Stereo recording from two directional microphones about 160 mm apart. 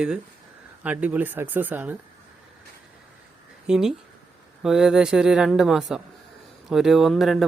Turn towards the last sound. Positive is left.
turn(degrees=0)  # may be behind; listen again after turning